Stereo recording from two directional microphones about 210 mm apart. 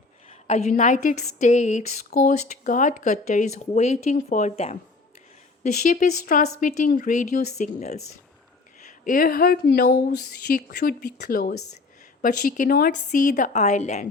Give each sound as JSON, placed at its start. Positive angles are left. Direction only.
{"t": 0.4, "sound": "speech", "side_deg": 30}
{"t": 5.9, "sound": "speech", "side_deg": 40}